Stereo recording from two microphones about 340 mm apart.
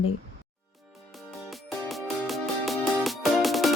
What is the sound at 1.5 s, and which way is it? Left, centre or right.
Music, centre.